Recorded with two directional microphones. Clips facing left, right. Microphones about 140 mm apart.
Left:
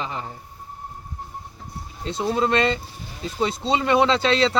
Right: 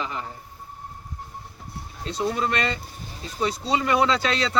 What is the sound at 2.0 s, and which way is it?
Speech, 25° left (ahead or behind).